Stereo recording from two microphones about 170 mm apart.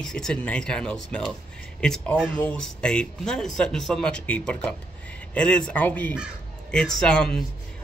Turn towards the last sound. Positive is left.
turn(degrees=5)  # may be behind; listen again after turning